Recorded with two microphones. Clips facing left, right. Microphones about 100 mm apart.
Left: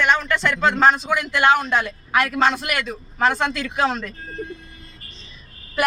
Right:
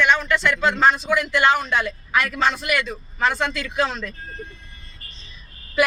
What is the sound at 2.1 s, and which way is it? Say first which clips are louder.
Speech: left 3 dB; 50° left (ahead or behind).